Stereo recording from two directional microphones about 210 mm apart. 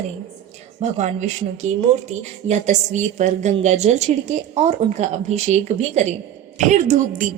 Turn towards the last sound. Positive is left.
turn(degrees=-35)  # may be behind; listen again after turning